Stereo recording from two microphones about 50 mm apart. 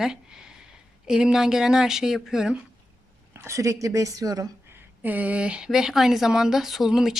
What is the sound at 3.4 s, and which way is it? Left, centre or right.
Speech, right.